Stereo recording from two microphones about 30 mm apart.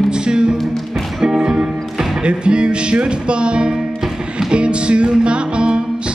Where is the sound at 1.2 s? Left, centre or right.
Centre.